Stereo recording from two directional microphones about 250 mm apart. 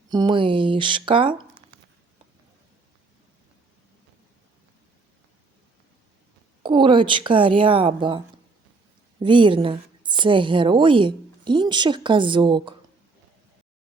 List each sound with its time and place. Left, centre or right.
0.1 s a woman's voice: centre
6.6 s a woman's voice: centre
9.2 s a woman's voice: centre